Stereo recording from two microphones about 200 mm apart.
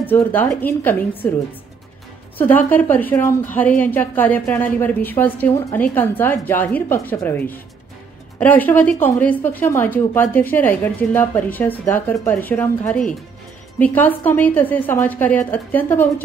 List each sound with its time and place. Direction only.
0.0 s speech: 10° left (ahead or behind)
2.3 s speech: 10° left (ahead or behind)